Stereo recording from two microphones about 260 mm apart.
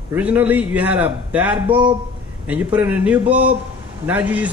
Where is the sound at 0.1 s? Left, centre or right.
Centre.